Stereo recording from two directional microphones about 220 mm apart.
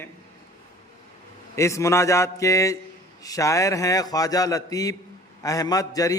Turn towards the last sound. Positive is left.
turn(degrees=15)  # may be behind; listen again after turning